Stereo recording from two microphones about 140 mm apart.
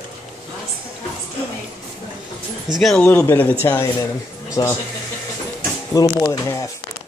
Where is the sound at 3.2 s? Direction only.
15° left (ahead or behind).